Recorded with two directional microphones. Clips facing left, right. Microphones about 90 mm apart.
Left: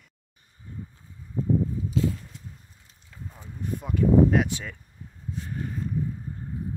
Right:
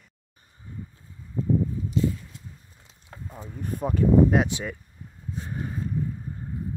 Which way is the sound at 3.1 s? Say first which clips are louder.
Right 4 dB; 60° right (ahead or behind).